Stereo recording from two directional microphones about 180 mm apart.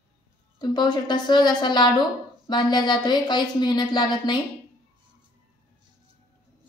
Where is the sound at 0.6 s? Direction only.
25° left (ahead or behind).